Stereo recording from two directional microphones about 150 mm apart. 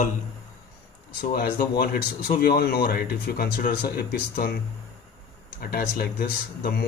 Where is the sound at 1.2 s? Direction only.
80° left.